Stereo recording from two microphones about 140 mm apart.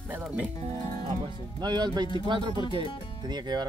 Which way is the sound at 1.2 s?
30° right (ahead or behind).